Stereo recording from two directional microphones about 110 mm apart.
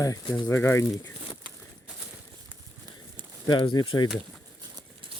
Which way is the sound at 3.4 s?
45° left (ahead or behind).